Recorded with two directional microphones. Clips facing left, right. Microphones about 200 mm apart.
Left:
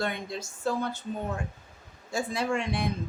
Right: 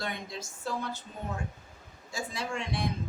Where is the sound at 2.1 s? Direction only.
55° left (ahead or behind).